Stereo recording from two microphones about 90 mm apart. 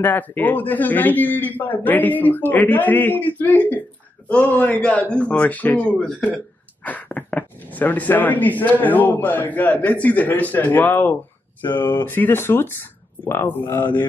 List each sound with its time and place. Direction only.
0.0 s speech: 20° left (ahead or behind)